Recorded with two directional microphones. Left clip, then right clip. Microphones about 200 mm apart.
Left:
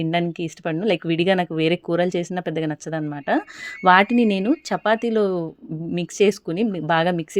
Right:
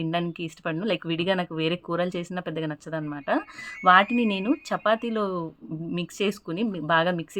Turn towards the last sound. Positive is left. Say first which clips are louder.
# left 3 dB
turn(degrees=30)  # may be behind; listen again after turning